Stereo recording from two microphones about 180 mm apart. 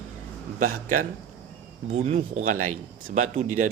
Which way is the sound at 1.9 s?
40° right (ahead or behind).